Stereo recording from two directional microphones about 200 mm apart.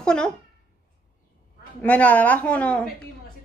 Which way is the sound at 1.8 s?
5° left (ahead or behind).